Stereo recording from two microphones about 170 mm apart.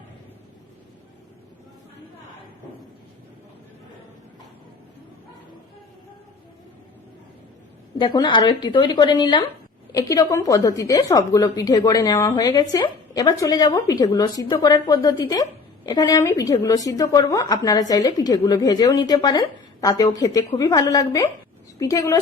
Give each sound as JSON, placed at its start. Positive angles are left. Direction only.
{"t": 7.9, "sound": "a woman's voice", "side_deg": 25}